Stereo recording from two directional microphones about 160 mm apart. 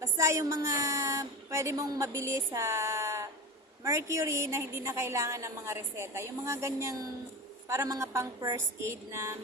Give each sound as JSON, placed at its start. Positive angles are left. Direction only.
{"t": 0.0, "sound": "a woman's voice", "side_deg": -15}